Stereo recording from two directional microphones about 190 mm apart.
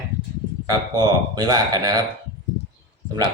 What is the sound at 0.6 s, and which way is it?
Speech, 20° right (ahead or behind).